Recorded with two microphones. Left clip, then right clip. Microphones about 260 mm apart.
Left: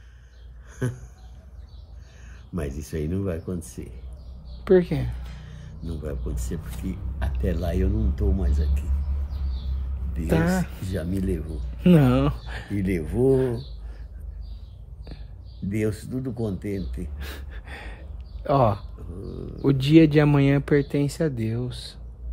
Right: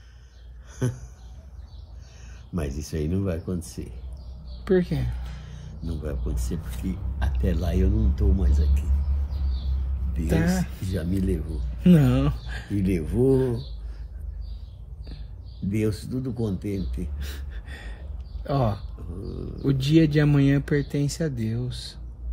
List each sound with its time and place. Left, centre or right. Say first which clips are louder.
0.7 s a sound: even; centre
2.8 s speech: right 1 dB; centre
4.6 s speech: left 4 dB; left
5.9 s speech: even; centre
10.2 s speech: left 2 dB; left
10.9 s speech: right 1 dB; centre
11.8 s speech: left 2 dB; left
12.7 s speech: even; centre
15.7 s speech: even; centre
17.2 s a sound: left 2 dB; left
18.9 s speech: even; centre
19.6 s speech: left 4 dB; left